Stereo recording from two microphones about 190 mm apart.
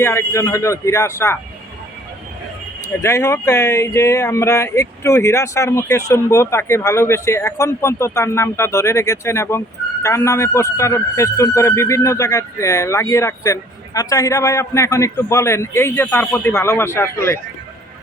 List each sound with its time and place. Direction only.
0.0 s speech: 15° left (ahead or behind)
3.0 s speech: 15° left (ahead or behind)